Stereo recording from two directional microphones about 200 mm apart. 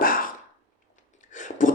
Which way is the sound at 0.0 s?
45° left (ahead or behind).